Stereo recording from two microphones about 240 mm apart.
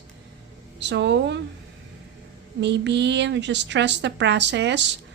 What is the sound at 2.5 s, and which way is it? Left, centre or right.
Speech, right.